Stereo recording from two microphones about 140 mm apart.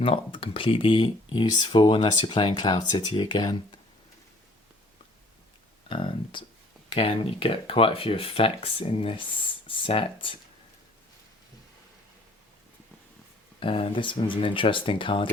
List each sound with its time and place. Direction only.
0.0 s speech: 40° left (ahead or behind)
5.9 s speech: 35° left (ahead or behind)
13.6 s speech: 40° left (ahead or behind)